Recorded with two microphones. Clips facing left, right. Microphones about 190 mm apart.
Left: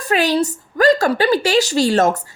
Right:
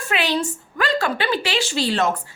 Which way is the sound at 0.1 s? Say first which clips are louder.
Left 6 dB; 40° left (ahead or behind).